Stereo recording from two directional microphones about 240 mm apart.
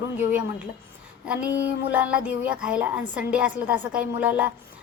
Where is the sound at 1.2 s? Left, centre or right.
Centre.